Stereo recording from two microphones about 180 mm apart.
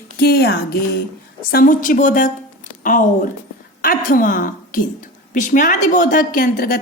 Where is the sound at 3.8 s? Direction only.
50° left (ahead or behind).